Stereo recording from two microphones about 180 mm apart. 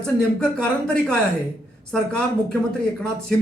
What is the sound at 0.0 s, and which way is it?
Speech, 5° left (ahead or behind).